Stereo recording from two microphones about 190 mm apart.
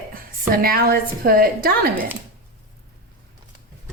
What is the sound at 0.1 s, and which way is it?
A woman's voice, 50° right (ahead or behind).